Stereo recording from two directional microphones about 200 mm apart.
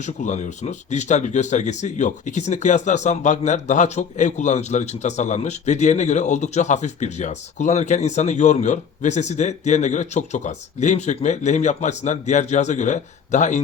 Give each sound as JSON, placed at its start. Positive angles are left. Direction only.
{"t": 0.0, "sound": "speech", "side_deg": 35}